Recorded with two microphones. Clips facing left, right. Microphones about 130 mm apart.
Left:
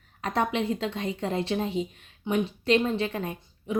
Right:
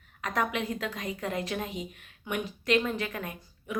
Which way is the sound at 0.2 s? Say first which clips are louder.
Left 4 dB; 30° left (ahead or behind).